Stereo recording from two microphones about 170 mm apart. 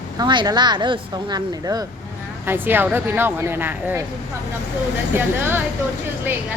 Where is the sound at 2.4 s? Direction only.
10° right (ahead or behind).